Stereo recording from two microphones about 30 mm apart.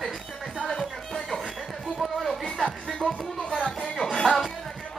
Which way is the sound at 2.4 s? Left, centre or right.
Left.